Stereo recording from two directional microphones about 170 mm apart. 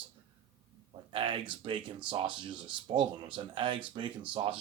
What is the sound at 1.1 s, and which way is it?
Speech, 30° right (ahead or behind).